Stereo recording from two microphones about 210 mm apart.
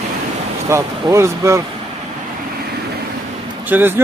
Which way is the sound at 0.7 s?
15° right (ahead or behind).